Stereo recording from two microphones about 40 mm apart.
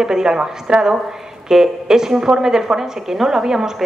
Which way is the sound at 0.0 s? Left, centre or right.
Centre.